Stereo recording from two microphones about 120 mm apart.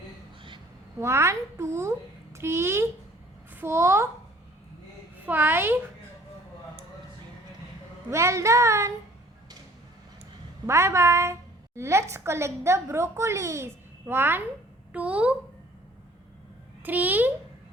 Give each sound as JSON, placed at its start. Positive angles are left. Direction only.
{"t": 0.9, "sound": "a woman's voice", "side_deg": -20}
{"t": 5.2, "sound": "a child's voice", "side_deg": -15}
{"t": 8.1, "sound": "a woman's voice", "side_deg": -25}
{"t": 10.7, "sound": "a woman's voice", "side_deg": -25}
{"t": 16.8, "sound": "a child's voice", "side_deg": -15}